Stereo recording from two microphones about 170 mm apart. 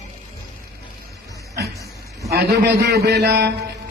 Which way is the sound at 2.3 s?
80° right.